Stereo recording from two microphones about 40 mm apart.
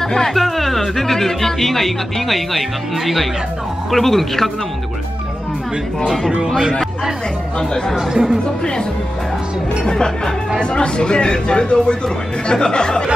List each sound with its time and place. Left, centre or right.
0.0 s speech: centre
6.0 s speech: centre
7.5 s speech: centre
8.1 s speech: centre
9.8 s speech: centre